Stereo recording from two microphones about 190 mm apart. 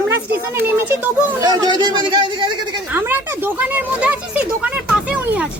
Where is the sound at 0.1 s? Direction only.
10° right (ahead or behind).